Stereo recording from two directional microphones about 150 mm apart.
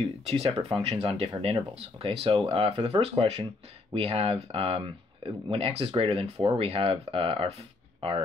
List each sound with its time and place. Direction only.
0.2 s speech: 40° right (ahead or behind)